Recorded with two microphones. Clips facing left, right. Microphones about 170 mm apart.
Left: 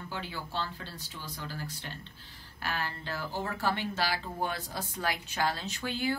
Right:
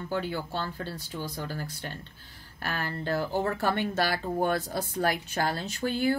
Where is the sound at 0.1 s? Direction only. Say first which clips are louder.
Right 7 dB; 50° right (ahead or behind).